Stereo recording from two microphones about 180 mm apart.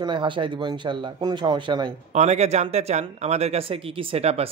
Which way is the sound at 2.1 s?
40° right (ahead or behind).